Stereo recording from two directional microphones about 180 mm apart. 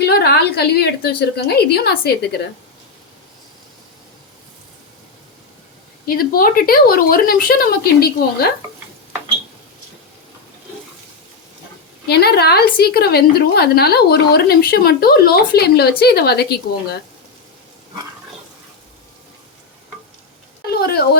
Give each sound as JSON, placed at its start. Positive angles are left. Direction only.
{"t": 0.0, "sound": "a woman's voice", "side_deg": 65}
{"t": 6.1, "sound": "a woman's voice", "side_deg": 55}
{"t": 12.0, "sound": "a woman's voice", "side_deg": 65}
{"t": 20.7, "sound": "speech", "side_deg": 60}